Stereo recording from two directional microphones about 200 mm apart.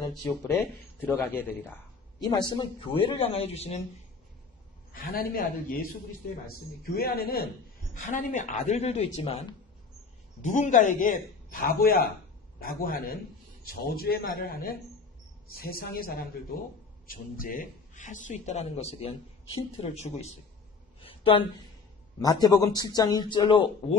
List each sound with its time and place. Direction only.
0.0 s a man's voice: 15° left (ahead or behind)
2.2 s speech: 20° left (ahead or behind)
4.9 s a man's voice: 45° left (ahead or behind)
7.0 s a man's voice: 50° left (ahead or behind); by 20.3 s 35° left (ahead or behind)
21.0 s a sound: 25° left (ahead or behind)
22.2 s speech: 20° left (ahead or behind)